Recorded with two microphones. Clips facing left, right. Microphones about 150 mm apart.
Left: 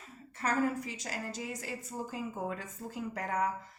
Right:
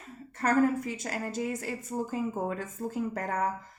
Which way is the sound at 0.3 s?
50° right (ahead or behind).